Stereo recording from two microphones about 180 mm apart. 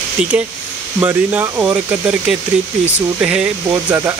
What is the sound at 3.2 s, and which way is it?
Speech, 5° right (ahead or behind).